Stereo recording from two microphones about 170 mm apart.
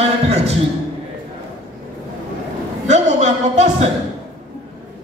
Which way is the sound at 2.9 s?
40° right (ahead or behind).